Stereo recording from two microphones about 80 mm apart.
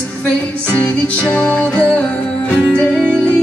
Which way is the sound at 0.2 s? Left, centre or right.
Centre.